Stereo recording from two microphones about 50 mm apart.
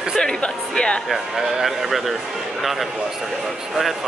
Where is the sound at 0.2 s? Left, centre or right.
Centre.